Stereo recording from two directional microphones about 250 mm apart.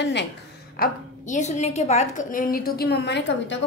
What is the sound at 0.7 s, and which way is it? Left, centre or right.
A woman's voice, left.